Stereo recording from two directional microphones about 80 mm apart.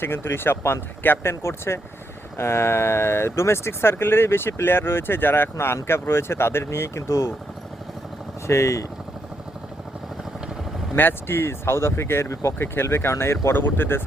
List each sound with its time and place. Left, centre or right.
0.0 s speech: left
8.4 s speech: left
10.9 s speech: left